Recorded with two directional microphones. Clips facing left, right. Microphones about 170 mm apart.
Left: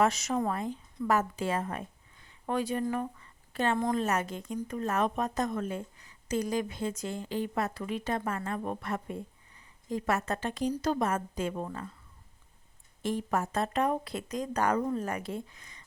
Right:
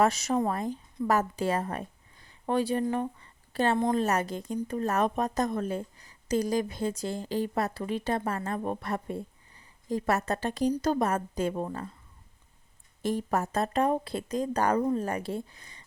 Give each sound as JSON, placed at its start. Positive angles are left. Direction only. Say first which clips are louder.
{"t": 0.0, "sound": "a woman's voice", "louder": "right 2 dB", "side_deg": -35}
{"t": 13.0, "sound": "a woman's voice", "louder": "right 2 dB", "side_deg": -40}